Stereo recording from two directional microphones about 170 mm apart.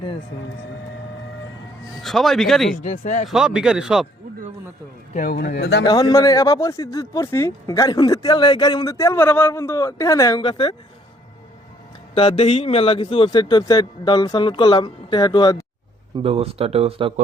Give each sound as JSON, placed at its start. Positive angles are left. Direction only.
{"t": 2.0, "sound": "speech", "side_deg": 0}
{"t": 2.7, "sound": "speech", "side_deg": 45}
{"t": 3.2, "sound": "speech", "side_deg": -5}
{"t": 5.5, "sound": "speech", "side_deg": 80}
{"t": 5.8, "sound": "speech", "side_deg": 25}
{"t": 12.1, "sound": "speech", "side_deg": 35}
{"t": 16.1, "sound": "speech", "side_deg": -35}